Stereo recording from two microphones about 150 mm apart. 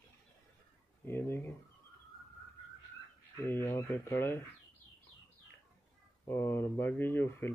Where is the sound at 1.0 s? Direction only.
15° left (ahead or behind).